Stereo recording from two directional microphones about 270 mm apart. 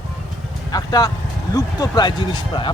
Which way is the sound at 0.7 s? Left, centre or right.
Centre.